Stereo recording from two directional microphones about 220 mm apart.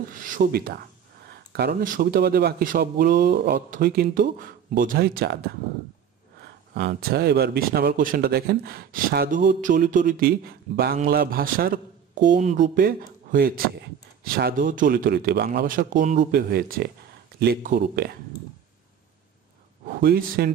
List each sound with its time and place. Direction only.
0.1 s speech: 35° right (ahead or behind)
20.0 s speech: 45° right (ahead or behind)